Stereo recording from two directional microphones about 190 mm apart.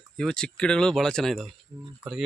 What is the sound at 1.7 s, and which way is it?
Speech, 20° right (ahead or behind).